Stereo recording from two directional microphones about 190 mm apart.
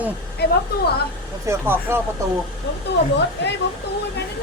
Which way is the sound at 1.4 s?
15° right (ahead or behind).